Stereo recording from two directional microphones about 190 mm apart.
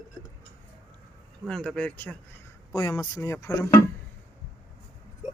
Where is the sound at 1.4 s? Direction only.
5° left (ahead or behind).